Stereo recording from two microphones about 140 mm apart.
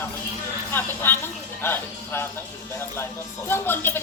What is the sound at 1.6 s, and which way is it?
Speech, 15° left (ahead or behind).